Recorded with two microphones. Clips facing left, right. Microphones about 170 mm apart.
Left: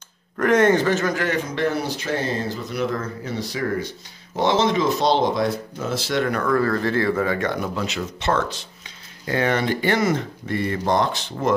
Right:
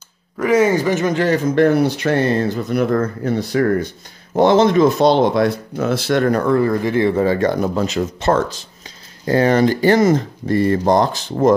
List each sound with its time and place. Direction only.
0.4 s speech: 5° right (ahead or behind)
1.1 s speech: 35° right (ahead or behind)
1.5 s speech: 55° right (ahead or behind)
6.3 s speech: 30° right (ahead or behind)
6.6 s speech: 15° right (ahead or behind); by 11.5 s 40° right (ahead or behind)